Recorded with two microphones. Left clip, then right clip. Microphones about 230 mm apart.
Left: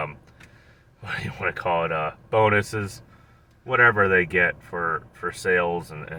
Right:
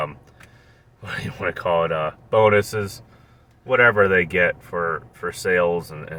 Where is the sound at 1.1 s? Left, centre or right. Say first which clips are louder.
Right 1 dB; centre.